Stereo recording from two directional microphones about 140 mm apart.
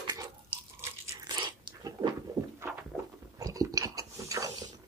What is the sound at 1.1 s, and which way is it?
Biting, 30° right (ahead or behind).